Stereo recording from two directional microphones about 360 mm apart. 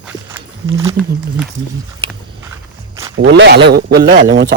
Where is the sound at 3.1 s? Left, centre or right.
Right.